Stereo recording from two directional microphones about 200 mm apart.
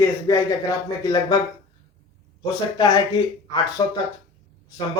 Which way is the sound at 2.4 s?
20° left (ahead or behind).